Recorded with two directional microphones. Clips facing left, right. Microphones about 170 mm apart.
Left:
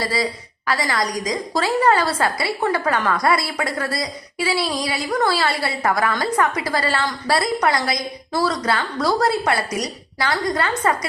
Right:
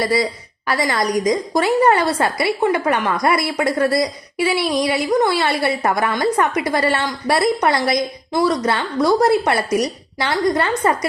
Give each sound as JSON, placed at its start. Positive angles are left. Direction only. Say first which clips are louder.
{"t": 0.0, "sound": "a woman's voice", "louder": "right 4 dB", "side_deg": -20}